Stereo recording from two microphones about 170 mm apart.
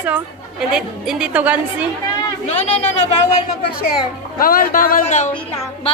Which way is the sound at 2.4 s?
40° left (ahead or behind).